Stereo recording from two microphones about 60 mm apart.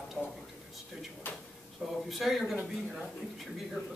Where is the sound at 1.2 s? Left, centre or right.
Left.